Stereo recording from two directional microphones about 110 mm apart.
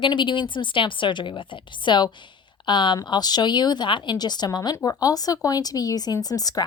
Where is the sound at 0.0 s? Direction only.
45° left (ahead or behind).